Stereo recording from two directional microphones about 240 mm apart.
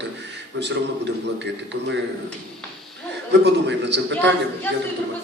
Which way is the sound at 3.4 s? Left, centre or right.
Right.